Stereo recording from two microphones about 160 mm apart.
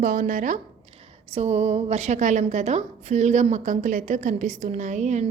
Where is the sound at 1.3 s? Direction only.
45° right (ahead or behind).